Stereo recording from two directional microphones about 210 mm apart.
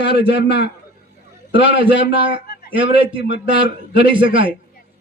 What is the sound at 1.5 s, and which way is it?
Speech, 25° right (ahead or behind).